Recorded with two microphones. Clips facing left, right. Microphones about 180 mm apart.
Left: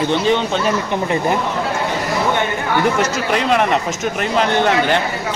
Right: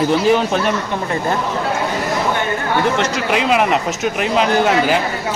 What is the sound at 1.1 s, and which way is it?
Speech, 15° left (ahead or behind).